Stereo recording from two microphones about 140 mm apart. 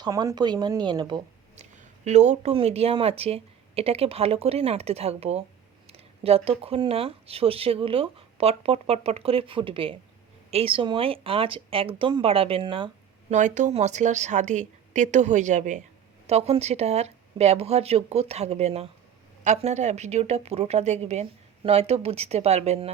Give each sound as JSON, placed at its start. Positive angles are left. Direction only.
{"t": 0.0, "sound": "speech", "side_deg": -25}
{"t": 1.5, "sound": "speech", "side_deg": -60}
{"t": 13.3, "sound": "a woman's voice", "side_deg": -60}
{"t": 16.2, "sound": "speech", "side_deg": -50}